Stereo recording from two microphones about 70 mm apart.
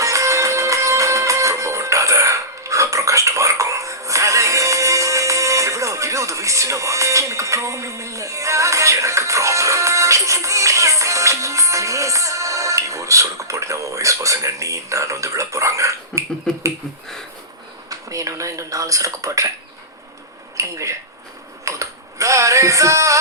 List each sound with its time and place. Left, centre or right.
0.0 s music: right
16.5 s finger snapping: centre
17.8 s speech: right
20.6 s speech: right
21.6 s a sound: right